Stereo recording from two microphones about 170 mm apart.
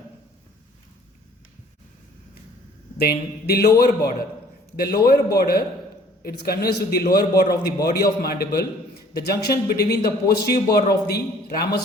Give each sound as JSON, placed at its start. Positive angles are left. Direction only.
{"t": 3.0, "sound": "a man's voice", "side_deg": 70}